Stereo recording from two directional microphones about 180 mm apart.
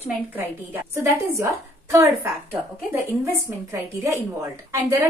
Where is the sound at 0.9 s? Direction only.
15° right (ahead or behind).